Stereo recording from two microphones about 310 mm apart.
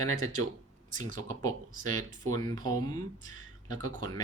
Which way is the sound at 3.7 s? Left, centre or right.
Right.